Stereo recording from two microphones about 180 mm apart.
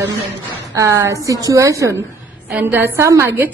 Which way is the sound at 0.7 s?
15° right (ahead or behind).